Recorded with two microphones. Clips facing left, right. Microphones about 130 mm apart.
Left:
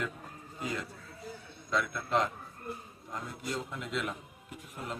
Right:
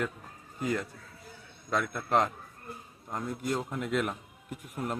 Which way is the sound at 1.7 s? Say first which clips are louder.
Right 3 dB; 50° right (ahead or behind).